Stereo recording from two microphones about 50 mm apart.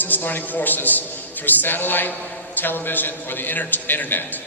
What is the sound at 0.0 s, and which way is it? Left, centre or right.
A man's voice, left.